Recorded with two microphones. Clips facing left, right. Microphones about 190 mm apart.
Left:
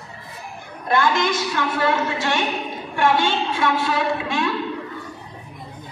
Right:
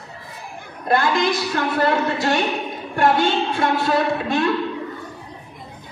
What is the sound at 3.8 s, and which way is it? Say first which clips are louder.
Speech: right 3 dB; 55° right (ahead or behind).